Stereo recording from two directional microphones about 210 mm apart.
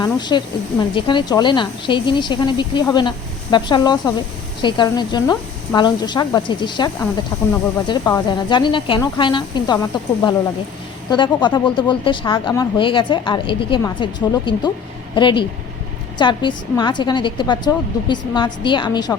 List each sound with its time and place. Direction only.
0.0 s speech: 20° left (ahead or behind)